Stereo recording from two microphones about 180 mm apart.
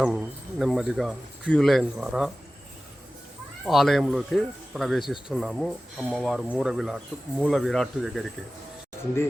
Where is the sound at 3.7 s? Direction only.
Centre (ahead or behind).